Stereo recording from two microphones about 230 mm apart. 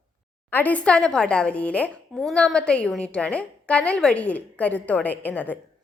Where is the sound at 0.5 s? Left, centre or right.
Centre.